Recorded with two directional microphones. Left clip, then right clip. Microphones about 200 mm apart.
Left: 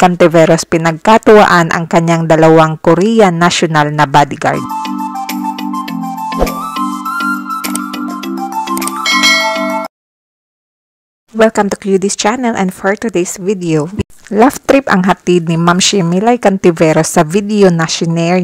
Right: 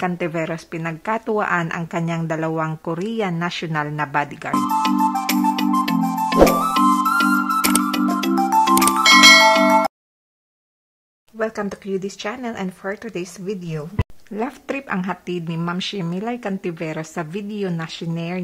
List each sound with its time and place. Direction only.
0.0 s speech: 35° left (ahead or behind)
4.6 s music: centre (ahead or behind)
11.3 s speech: 40° left (ahead or behind)